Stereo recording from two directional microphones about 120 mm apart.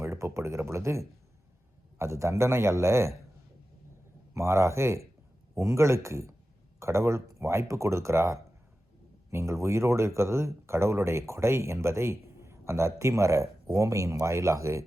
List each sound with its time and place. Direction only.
0.0 s speech: 25° right (ahead or behind)
4.4 s speech: 20° right (ahead or behind)